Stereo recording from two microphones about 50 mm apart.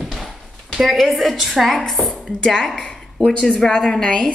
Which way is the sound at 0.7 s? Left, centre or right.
Centre.